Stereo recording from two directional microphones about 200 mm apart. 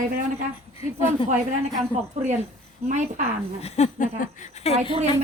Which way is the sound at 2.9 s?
40° right (ahead or behind).